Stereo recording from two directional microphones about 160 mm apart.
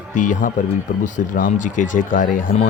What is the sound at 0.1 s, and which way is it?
A man's voice, 55° left (ahead or behind).